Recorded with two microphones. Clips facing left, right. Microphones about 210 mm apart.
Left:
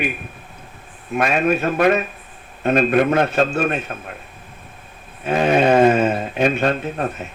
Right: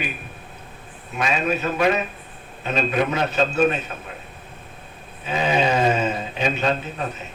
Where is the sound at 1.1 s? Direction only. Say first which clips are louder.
Left 5 dB; 55° left (ahead or behind).